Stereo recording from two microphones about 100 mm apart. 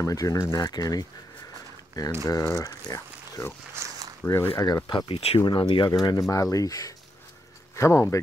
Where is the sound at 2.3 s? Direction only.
35° left (ahead or behind).